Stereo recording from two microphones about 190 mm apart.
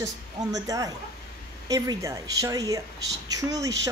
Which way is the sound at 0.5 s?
20° right (ahead or behind).